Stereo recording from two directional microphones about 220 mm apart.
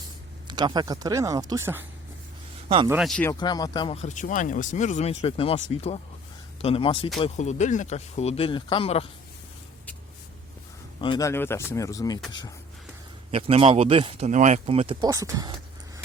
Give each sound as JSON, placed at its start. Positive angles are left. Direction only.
{"t": 0.4, "sound": "speech", "side_deg": -20}
{"t": 2.6, "sound": "speech", "side_deg": -20}
{"t": 2.9, "sound": "speech", "side_deg": 0}
{"t": 3.2, "sound": "speech", "side_deg": 15}
{"t": 3.9, "sound": "speech", "side_deg": 35}
{"t": 11.0, "sound": "speech", "side_deg": 20}
{"t": 13.3, "sound": "speech", "side_deg": -25}
{"t": 15.1, "sound": "speech", "side_deg": -15}